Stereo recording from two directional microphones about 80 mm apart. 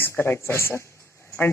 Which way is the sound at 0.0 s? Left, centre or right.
Left.